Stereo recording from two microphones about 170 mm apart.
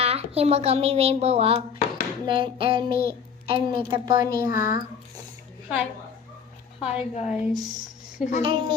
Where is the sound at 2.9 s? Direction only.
60° left (ahead or behind).